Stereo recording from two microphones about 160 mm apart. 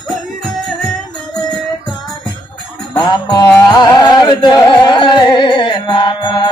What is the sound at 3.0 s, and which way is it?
Music, 25° left (ahead or behind).